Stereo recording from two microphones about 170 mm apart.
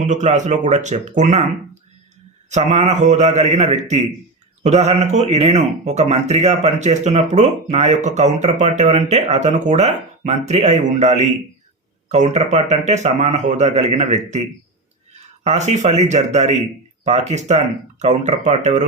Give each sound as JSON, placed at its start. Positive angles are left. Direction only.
{"t": 0.0, "sound": "a man's voice", "side_deg": -45}
{"t": 2.5, "sound": "a man's voice", "side_deg": -40}
{"t": 15.4, "sound": "a man's voice", "side_deg": -40}